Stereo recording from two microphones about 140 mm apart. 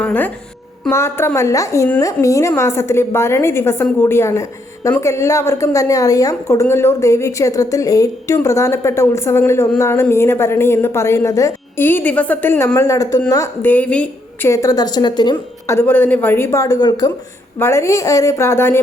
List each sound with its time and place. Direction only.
0.0 s a woman's voice: 10° left (ahead or behind)
14.5 s a woman's voice: 25° left (ahead or behind)
15.6 s a woman's voice: 20° left (ahead or behind)